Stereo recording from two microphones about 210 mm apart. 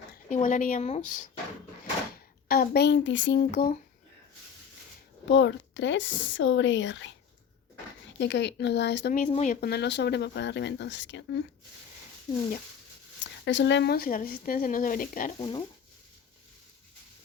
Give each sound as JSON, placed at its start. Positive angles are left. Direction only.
{"t": 0.3, "sound": "a woman's voice", "side_deg": 35}
{"t": 2.5, "sound": "speech", "side_deg": 50}
{"t": 5.3, "sound": "speech", "side_deg": 55}
{"t": 8.2, "sound": "speech", "side_deg": 55}
{"t": 9.1, "sound": "a woman's voice", "side_deg": 35}
{"t": 9.6, "sound": "speech", "side_deg": 50}
{"t": 13.4, "sound": "speech", "side_deg": 60}
{"t": 15.4, "sound": "speech", "side_deg": 25}